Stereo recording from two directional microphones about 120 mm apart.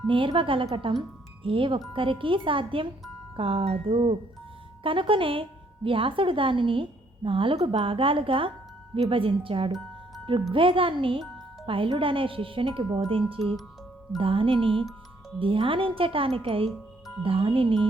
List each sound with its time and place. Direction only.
0.1 s a woman's voice: 45° right (ahead or behind)
16.6 s music: centre (ahead or behind)
17.2 s a woman's voice: 50° right (ahead or behind)